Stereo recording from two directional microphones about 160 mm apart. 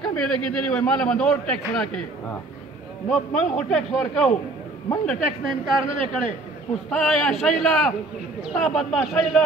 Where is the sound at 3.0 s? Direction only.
5° left (ahead or behind).